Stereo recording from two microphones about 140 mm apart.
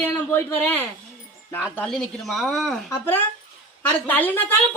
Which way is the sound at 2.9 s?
15° left (ahead or behind).